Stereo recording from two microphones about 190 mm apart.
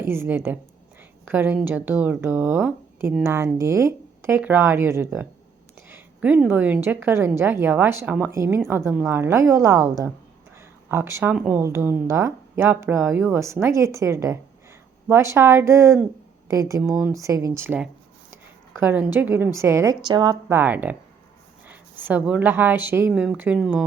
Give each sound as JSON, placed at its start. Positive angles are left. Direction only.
{"t": 0.0, "sound": "a woman's voice", "side_deg": -10}
{"t": 20.6, "sound": "a woman's voice", "side_deg": -10}